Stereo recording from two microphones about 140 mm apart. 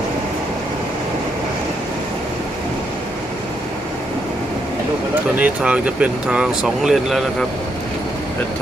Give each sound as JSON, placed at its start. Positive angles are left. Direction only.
{"t": 5.4, "sound": "speech", "side_deg": -10}